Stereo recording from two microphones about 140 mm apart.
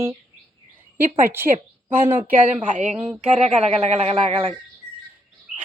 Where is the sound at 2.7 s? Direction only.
60° right (ahead or behind).